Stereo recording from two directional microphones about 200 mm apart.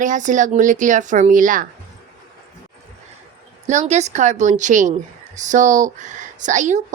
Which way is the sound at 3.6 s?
35° right (ahead or behind).